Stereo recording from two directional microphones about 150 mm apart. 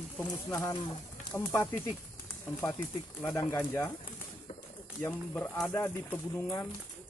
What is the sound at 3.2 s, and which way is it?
Speech, 15° left (ahead or behind).